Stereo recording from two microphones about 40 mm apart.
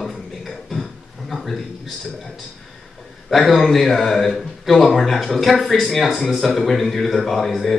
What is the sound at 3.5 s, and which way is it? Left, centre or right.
Speech, centre.